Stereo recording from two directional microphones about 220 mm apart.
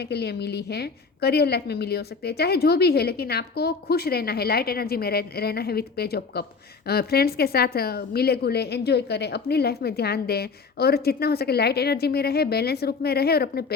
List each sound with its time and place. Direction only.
0.0 s a woman's voice: 50° left (ahead or behind)